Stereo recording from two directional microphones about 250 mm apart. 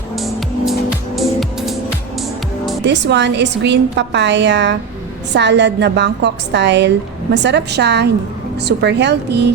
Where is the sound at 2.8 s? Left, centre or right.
Right.